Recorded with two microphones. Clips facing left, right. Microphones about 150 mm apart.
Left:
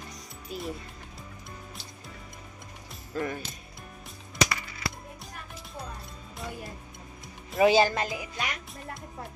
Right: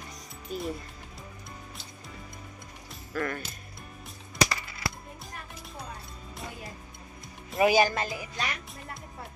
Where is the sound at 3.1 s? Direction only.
20° left (ahead or behind).